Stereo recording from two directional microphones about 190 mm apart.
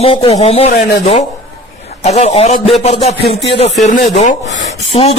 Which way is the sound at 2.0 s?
35° left (ahead or behind).